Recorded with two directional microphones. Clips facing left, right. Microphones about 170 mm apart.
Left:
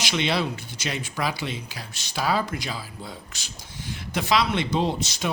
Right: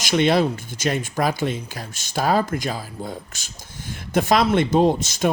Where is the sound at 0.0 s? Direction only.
50° right (ahead or behind).